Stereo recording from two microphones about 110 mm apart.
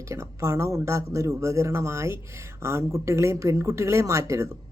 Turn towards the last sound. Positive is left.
turn(degrees=-30)  # may be behind; listen again after turning